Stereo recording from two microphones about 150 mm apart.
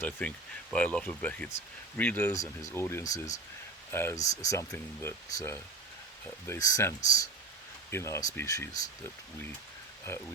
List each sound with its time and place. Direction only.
0.0 s speech: 10° left (ahead or behind)
2.2 s speech: 20° left (ahead or behind)
3.1 s speech: 55° left (ahead or behind)
3.9 s speech: 20° left (ahead or behind)
10.1 s speech: 15° left (ahead or behind)